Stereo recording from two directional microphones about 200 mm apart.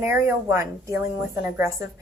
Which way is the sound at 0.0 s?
10° right (ahead or behind).